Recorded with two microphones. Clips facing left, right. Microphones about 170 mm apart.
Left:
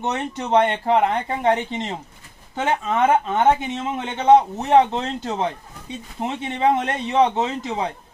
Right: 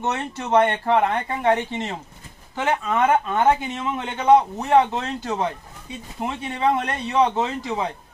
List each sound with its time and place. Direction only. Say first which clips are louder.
0.0 s speech: left 1 dB; 20° left (ahead or behind)